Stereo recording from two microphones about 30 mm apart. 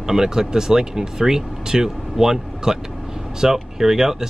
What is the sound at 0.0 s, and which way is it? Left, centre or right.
Speech, centre.